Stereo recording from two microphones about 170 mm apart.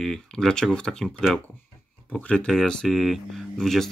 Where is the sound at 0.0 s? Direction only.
5° left (ahead or behind).